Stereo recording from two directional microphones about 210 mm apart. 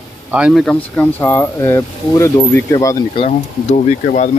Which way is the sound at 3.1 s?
35° left (ahead or behind).